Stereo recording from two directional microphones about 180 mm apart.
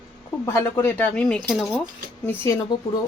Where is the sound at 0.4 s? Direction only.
15° left (ahead or behind).